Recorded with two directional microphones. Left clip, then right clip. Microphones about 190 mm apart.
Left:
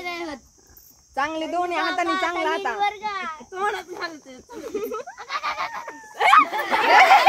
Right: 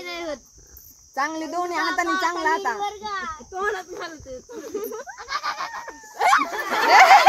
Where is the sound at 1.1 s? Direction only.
40° right (ahead or behind).